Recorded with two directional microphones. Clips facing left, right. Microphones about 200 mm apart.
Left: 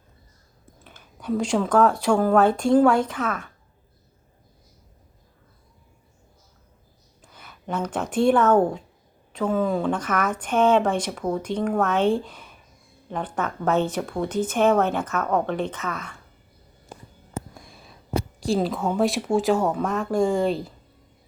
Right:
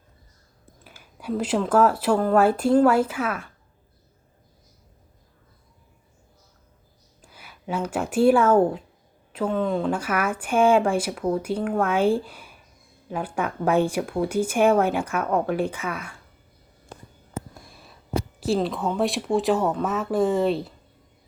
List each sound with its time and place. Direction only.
0.9 s speech: 10° right (ahead or behind)
7.2 s speech: 10° right (ahead or behind)
9.9 s speech: 10° right (ahead or behind)
18.3 s speech: centre (ahead or behind)